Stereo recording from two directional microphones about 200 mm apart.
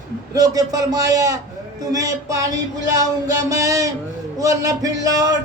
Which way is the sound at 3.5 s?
15° right (ahead or behind).